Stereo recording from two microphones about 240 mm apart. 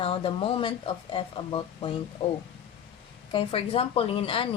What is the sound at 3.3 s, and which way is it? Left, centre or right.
Speech, left.